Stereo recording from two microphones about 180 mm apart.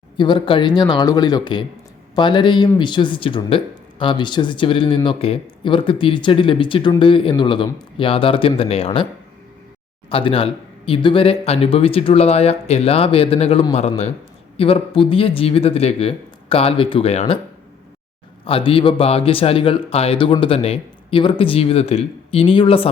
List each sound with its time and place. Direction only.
0.2 s speech: 25° left (ahead or behind)
10.1 s speech: 30° left (ahead or behind)
18.4 s speech: 30° left (ahead or behind)